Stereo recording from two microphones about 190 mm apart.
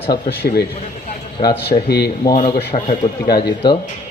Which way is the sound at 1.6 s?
60° left (ahead or behind).